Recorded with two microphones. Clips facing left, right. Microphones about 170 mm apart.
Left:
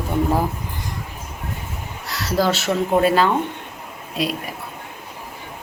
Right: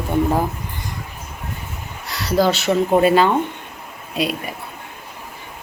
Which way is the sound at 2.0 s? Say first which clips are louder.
Right 3 dB; centre (ahead or behind).